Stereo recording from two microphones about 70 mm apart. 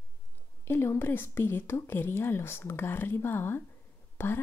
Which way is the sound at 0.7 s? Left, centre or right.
Left.